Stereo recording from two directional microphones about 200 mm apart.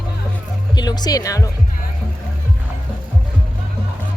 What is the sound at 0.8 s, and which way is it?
Speech, 20° left (ahead or behind).